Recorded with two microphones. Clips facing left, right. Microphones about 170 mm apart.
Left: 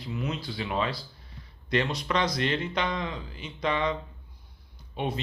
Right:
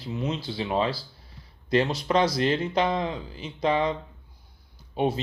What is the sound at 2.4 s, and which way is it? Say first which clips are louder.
Speech: right 5 dB; 35° right (ahead or behind).